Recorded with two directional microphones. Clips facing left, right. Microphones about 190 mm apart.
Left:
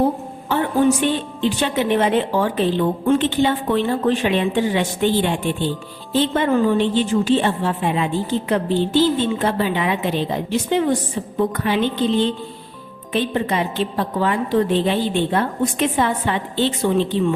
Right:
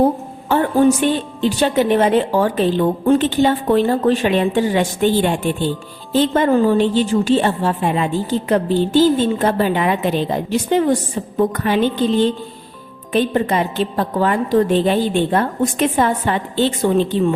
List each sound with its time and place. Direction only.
0.4 s a woman's voice: 45° right (ahead or behind)